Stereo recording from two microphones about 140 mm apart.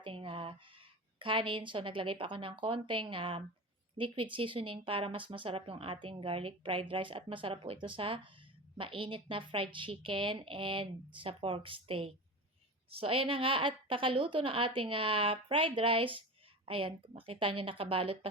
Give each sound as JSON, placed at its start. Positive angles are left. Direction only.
{"t": 0.0, "sound": "a woman's voice", "side_deg": -40}